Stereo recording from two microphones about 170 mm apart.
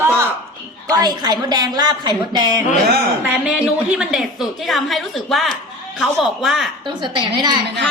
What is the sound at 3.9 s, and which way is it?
A woman's voice, 5° right (ahead or behind).